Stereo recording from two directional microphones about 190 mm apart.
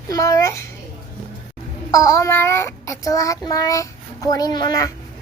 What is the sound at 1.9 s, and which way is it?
A child's voice, 15° left (ahead or behind).